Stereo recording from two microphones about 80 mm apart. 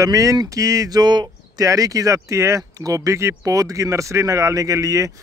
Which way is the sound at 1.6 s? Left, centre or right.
Right.